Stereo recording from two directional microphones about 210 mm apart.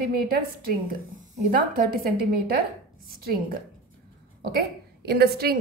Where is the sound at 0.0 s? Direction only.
45° right (ahead or behind).